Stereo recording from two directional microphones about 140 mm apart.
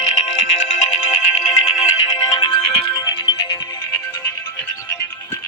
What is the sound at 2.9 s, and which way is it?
Music, 35° left (ahead or behind).